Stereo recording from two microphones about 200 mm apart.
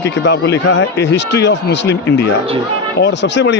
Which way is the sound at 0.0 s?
60° left (ahead or behind).